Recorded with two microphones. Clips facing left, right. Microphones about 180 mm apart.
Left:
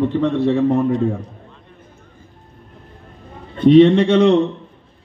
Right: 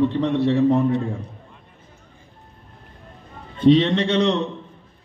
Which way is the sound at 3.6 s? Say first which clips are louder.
Left 6 dB; 55° left (ahead or behind).